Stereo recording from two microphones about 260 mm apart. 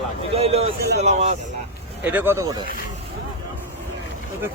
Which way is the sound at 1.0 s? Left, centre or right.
Right.